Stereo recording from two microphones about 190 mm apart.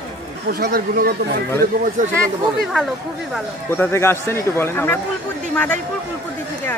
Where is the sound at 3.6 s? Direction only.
10° left (ahead or behind).